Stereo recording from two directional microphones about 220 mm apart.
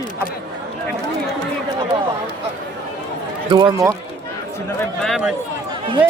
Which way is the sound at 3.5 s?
20° right (ahead or behind).